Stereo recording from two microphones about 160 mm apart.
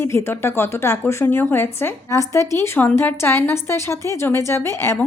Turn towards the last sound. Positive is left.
turn(degrees=15)  # may be behind; listen again after turning